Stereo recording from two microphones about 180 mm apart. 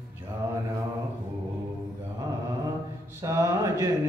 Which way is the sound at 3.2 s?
15° right (ahead or behind).